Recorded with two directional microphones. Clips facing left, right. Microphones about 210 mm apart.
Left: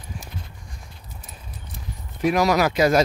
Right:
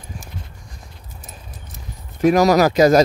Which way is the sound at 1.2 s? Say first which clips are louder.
Right 3 dB; 45° right (ahead or behind).